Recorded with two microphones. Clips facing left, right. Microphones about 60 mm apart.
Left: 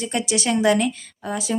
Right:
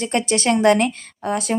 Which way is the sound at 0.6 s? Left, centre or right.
Right.